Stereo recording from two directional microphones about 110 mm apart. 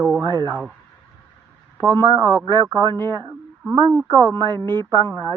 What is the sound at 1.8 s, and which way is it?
Speech, 40° right (ahead or behind).